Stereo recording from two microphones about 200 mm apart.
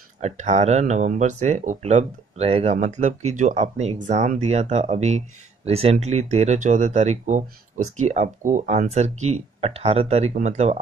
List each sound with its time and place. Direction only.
0.2 s speech: 35° right (ahead or behind)